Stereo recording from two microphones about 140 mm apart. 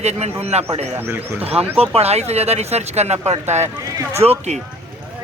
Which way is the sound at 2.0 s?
50° right (ahead or behind).